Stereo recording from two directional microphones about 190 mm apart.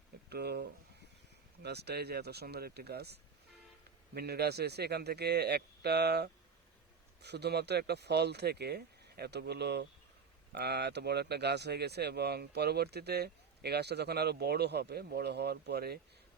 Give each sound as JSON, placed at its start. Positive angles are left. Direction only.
{"t": 0.3, "sound": "speech", "side_deg": -60}